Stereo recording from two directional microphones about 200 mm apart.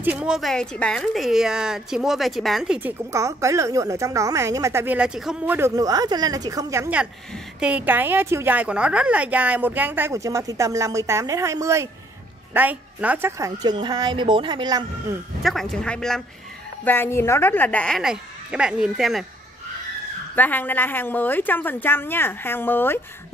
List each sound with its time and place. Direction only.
0.0 s a woman's voice: 5° right (ahead or behind)
3.1 s a woman's voice: 15° right (ahead or behind)
15.4 s a woman's voice: centre (ahead or behind)
20.3 s a woman's voice: 10° left (ahead or behind)